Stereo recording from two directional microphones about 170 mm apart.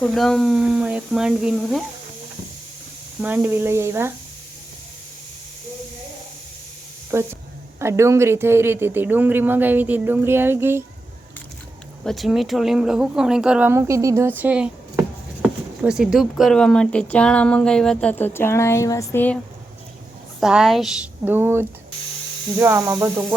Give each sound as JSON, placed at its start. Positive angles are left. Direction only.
{"t": 0.0, "sound": "speech", "side_deg": 0}
{"t": 3.2, "sound": "speech", "side_deg": -10}
{"t": 7.1, "sound": "speech", "side_deg": -15}
{"t": 12.0, "sound": "speech", "side_deg": 0}
{"t": 20.4, "sound": "speech", "side_deg": -5}
{"t": 21.2, "sound": "speech", "side_deg": -15}